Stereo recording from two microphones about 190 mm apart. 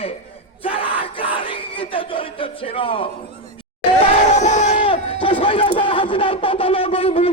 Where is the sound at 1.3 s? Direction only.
25° left (ahead or behind).